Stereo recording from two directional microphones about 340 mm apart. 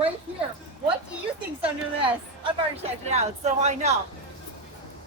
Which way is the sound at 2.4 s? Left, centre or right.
Centre.